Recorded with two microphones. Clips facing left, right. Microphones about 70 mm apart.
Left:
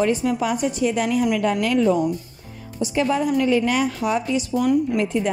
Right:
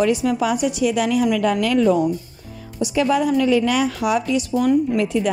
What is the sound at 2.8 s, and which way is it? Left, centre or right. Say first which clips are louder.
A woman's voice: right 2 dB; right.